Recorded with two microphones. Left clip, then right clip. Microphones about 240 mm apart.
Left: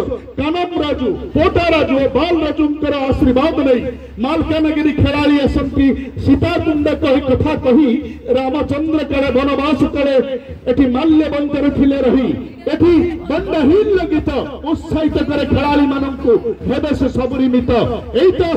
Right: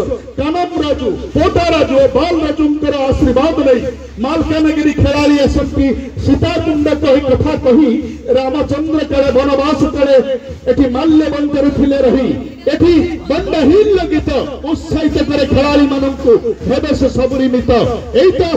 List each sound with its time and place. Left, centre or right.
0.4 s a man's voice: left